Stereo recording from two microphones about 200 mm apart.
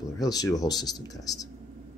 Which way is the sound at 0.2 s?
20° left (ahead or behind).